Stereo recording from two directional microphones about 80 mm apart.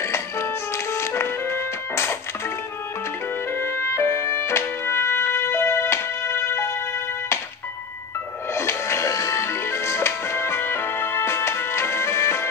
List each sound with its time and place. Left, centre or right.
0.0 s music: left
3.5 s music: left
8.5 s music: left